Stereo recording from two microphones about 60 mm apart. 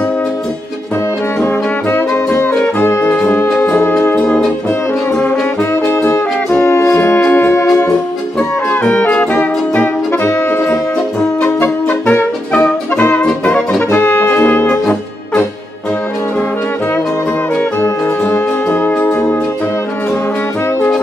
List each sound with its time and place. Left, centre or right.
2.4 s music: left
5.6 s brass instrument: left
8.6 s music: centre
11.4 s music: left
13.8 s brass instrument: left
18.2 s music: left